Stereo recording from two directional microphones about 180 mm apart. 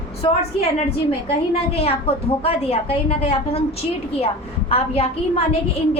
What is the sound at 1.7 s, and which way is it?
A woman's voice, 35° left (ahead or behind).